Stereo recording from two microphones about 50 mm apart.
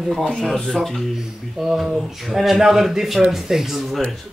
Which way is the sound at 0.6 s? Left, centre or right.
Centre.